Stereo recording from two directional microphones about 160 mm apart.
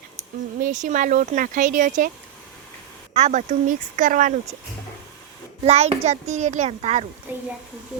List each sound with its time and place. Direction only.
0.6 s speech: 50° right (ahead or behind)
3.2 s speech: 50° right (ahead or behind)
5.6 s speech: 40° right (ahead or behind)
7.3 s a woman's voice: 10° right (ahead or behind)